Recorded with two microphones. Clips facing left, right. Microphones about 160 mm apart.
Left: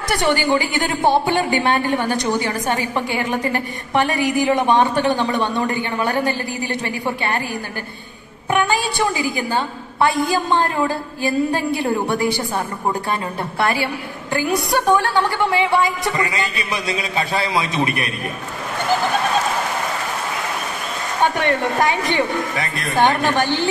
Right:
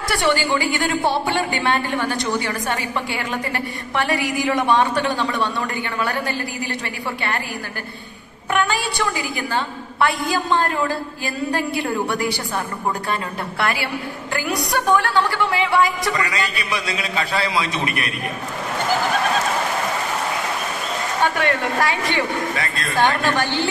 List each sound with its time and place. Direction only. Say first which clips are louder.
0.1 s a woman's voice: left 2 dB; 20° left (ahead or behind)
8.5 s a woman's voice: left 2 dB; 20° left (ahead or behind)
13.6 s a woman's voice: left 3 dB; 20° left (ahead or behind)
21.4 s a woman's voice: left 2 dB; 20° left (ahead or behind)